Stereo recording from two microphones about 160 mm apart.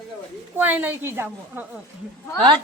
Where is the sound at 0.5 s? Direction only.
10° right (ahead or behind).